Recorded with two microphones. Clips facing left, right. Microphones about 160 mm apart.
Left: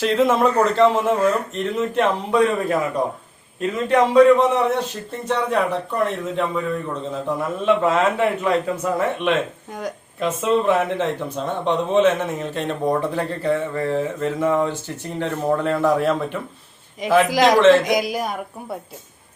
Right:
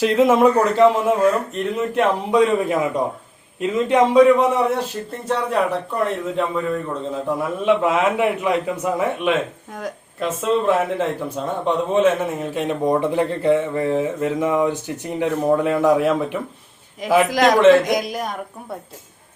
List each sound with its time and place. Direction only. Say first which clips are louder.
0.0 s a man's voice: right 3 dB; 10° right (ahead or behind)
2.3 s a man's voice: right 2 dB; 15° right (ahead or behind); by 18.8 s 5° left (ahead or behind)